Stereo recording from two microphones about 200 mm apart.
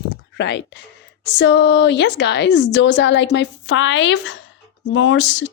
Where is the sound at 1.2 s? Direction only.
65° left (ahead or behind).